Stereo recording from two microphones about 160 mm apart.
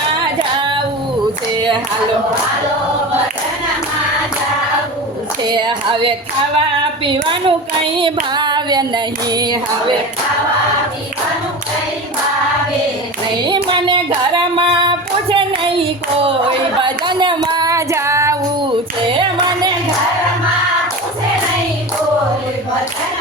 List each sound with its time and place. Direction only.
5.5 s a woman's voice: 25° right (ahead or behind)
7.9 s female singing: 30° right (ahead or behind)
9.3 s speech: 25° right (ahead or behind)
13.5 s child singing: 30° right (ahead or behind)
16.8 s female singing: 30° right (ahead or behind)